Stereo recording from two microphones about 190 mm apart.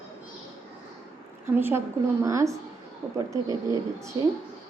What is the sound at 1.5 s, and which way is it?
Speech, 10° right (ahead or behind).